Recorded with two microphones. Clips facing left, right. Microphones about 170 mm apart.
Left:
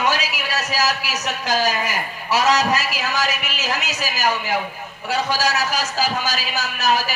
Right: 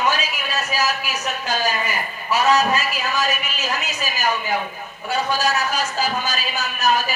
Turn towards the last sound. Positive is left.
turn(degrees=90)